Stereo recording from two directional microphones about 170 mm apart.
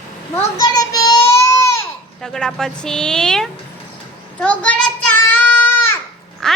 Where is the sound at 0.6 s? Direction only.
20° left (ahead or behind).